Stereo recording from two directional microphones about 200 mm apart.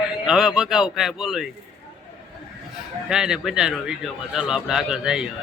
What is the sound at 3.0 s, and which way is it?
A man's voice, 5° right (ahead or behind).